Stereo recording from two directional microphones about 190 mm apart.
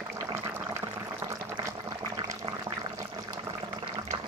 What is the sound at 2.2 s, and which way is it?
Toilet flush, 20° right (ahead or behind).